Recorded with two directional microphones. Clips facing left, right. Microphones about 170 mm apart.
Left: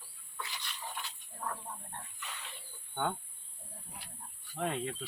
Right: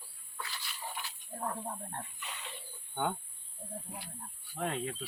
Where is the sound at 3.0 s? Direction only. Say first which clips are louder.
Right 1 dB; 10° right (ahead or behind).